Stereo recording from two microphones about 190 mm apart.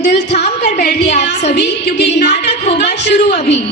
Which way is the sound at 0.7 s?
55° left (ahead or behind).